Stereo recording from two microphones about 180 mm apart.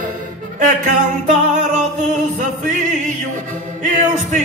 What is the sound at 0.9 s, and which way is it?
Music, 40° right (ahead or behind).